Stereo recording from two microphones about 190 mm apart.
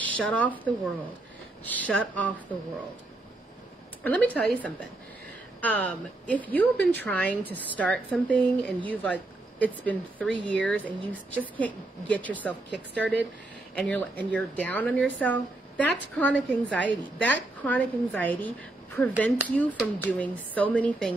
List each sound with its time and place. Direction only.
0.0 s speech: 5° left (ahead or behind)
4.0 s speech: 10° left (ahead or behind)
12.6 s a woman's voice: 65° right (ahead or behind)
13.7 s speech: 5° left (ahead or behind)